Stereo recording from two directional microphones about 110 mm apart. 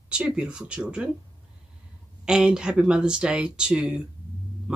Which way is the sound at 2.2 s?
5° right (ahead or behind).